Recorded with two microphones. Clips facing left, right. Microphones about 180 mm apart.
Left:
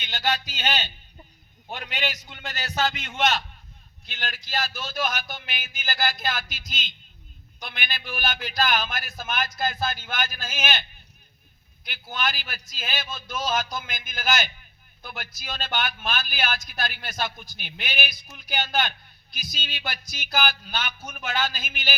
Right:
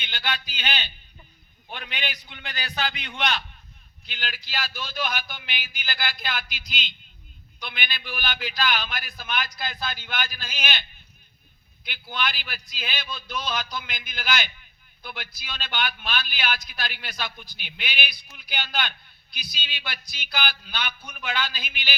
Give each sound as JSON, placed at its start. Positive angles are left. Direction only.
{"t": 0.0, "sound": "a man's voice", "side_deg": 45}